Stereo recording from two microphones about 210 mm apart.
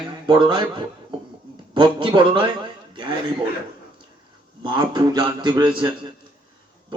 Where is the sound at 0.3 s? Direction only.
20° right (ahead or behind).